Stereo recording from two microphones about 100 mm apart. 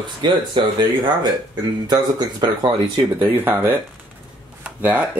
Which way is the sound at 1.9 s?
45° right (ahead or behind).